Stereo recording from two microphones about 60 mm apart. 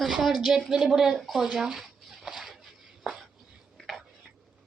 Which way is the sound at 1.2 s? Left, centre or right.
Centre.